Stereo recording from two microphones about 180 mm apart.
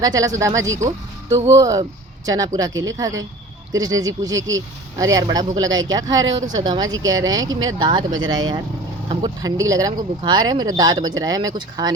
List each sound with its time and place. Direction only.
0.0 s speech: 20° right (ahead or behind)
5.6 s speech: 90° right
5.9 s speech: 20° right (ahead or behind)